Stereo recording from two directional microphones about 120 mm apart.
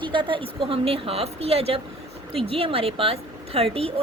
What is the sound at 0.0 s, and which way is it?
Speech, 45° right (ahead or behind).